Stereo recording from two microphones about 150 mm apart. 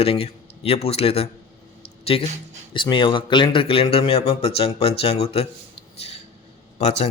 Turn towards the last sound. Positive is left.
turn(degrees=50)  # may be behind; listen again after turning